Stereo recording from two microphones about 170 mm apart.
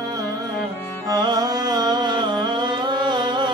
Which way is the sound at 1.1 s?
25° right (ahead or behind).